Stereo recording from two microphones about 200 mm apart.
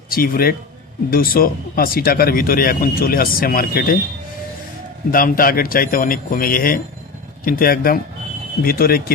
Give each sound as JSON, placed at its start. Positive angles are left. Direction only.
{"t": 0.1, "sound": "speech", "side_deg": 45}
{"t": 5.1, "sound": "speech", "side_deg": 45}